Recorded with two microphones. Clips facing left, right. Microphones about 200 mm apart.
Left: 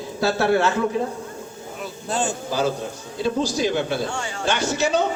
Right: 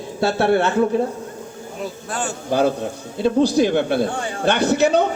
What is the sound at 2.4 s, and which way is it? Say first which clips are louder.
A man's voice: right 5 dB; 60° right (ahead or behind).